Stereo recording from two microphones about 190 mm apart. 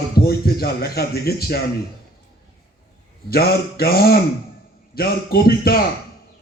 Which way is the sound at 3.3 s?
55° left (ahead or behind).